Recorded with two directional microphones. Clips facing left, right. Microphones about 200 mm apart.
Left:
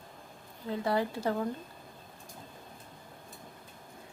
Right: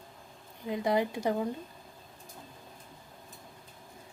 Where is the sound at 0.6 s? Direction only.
15° right (ahead or behind).